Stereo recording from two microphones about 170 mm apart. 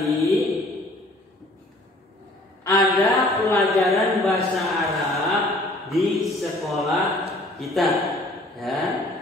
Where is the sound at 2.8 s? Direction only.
Centre (ahead or behind).